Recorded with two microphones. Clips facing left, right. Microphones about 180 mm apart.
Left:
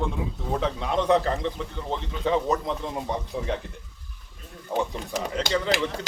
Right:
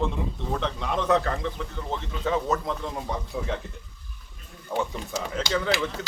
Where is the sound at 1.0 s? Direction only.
25° left (ahead or behind).